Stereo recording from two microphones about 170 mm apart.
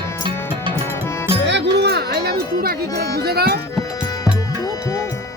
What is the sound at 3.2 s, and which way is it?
Speech, 65° right (ahead or behind).